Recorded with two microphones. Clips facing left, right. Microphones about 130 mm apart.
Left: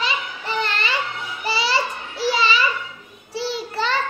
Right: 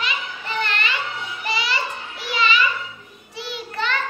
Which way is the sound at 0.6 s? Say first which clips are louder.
Left 1 dB; 35° left (ahead or behind).